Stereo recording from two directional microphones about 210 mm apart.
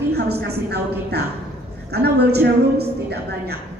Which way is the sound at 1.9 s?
50° right (ahead or behind).